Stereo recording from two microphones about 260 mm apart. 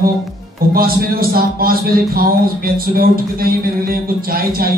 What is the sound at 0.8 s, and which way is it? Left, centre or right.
A man's voice, right.